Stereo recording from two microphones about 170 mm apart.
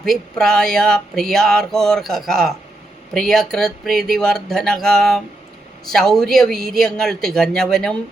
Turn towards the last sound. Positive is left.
turn(degrees=5)  # may be behind; listen again after turning